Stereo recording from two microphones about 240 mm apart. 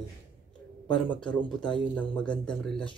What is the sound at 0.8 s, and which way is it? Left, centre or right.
Speech, centre.